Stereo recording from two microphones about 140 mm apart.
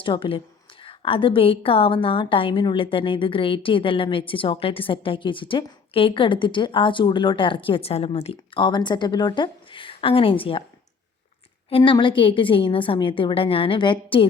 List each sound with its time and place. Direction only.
0.0 s a woman's voice: 40° left (ahead or behind)
11.9 s a woman's voice: 35° left (ahead or behind)